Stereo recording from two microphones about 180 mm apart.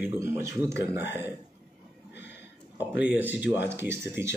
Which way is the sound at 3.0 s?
10° right (ahead or behind).